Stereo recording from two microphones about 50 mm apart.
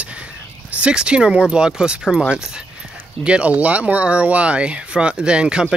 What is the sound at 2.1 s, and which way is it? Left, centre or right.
Speech, centre.